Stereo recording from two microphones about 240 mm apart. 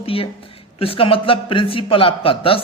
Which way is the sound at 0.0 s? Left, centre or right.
Left.